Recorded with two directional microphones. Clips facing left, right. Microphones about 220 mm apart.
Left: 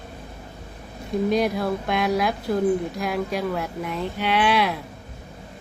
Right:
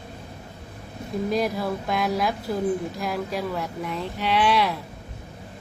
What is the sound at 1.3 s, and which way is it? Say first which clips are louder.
Speech: left 2 dB; centre (ahead or behind).